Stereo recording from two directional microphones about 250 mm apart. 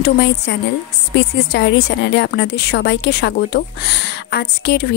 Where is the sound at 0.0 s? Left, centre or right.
Left.